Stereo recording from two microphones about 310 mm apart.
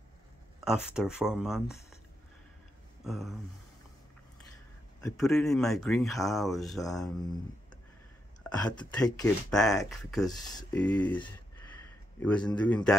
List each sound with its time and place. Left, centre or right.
0.7 s speech: centre
3.0 s a sound: centre
5.0 s speech: centre
8.6 s speech: centre
10.3 s speech: centre